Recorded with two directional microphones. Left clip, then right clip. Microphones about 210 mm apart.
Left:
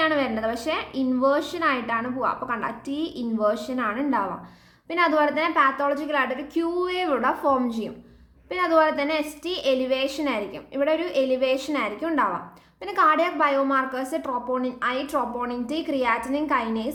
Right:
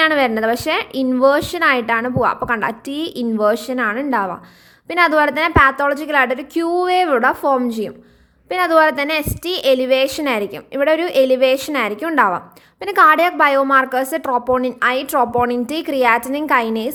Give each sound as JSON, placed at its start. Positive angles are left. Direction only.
{"t": 0.0, "sound": "speech", "side_deg": -40}